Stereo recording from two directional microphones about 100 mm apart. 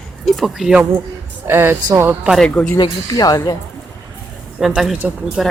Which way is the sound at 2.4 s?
10° left (ahead or behind).